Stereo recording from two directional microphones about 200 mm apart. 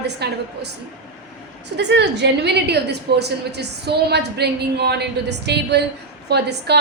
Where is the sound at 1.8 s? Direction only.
60° right (ahead or behind).